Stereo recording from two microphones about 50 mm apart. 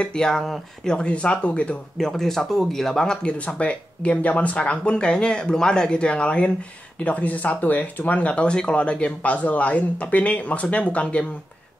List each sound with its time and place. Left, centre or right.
0.0 s speech: centre
2.0 s speech: centre; by 11.2 s left